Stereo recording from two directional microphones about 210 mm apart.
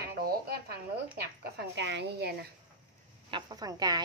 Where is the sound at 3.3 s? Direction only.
20° right (ahead or behind).